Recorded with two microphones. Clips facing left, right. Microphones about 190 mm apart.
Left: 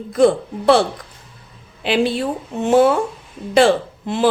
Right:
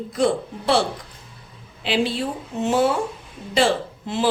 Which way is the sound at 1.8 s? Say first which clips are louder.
Left 4 dB; 55° left (ahead or behind).